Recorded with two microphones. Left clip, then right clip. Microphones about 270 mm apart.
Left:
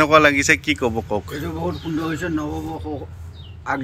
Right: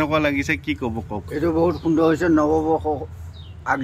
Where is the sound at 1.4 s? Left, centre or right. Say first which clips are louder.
Right 7 dB; centre.